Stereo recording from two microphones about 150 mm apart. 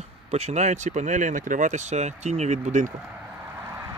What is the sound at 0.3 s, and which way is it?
Speech, 45° right (ahead or behind).